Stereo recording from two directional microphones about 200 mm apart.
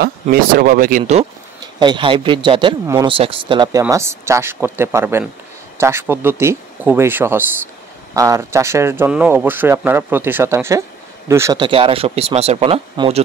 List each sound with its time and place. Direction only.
0.0 s speech: 45° right (ahead or behind)
1.6 s a man's voice: 20° right (ahead or behind)